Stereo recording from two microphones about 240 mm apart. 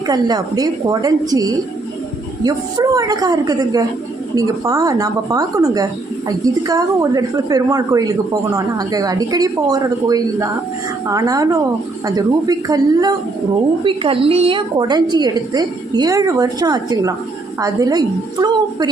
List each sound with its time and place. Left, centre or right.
0.1 s speech: centre